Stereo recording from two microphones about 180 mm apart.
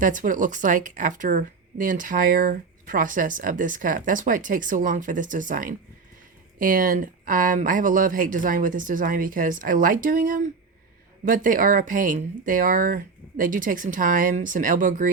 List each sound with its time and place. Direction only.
0.0 s speech: 45° right (ahead or behind)